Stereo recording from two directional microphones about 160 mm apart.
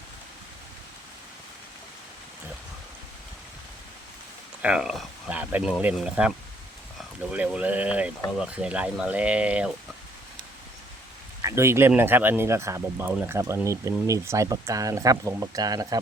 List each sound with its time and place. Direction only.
4.6 s speech: 5° right (ahead or behind)
7.3 s speech: 10° right (ahead or behind)
11.4 s speech: 15° right (ahead or behind)